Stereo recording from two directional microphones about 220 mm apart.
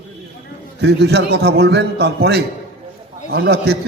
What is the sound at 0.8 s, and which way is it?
A man's voice, 50° right (ahead or behind).